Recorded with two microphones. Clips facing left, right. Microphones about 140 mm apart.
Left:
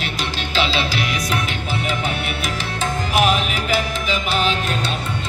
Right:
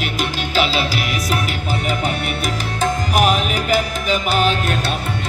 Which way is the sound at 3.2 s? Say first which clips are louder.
Right 1 dB; 40° right (ahead or behind).